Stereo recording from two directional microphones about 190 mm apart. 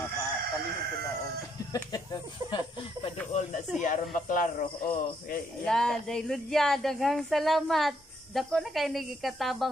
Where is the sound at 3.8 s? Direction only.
45° left (ahead or behind).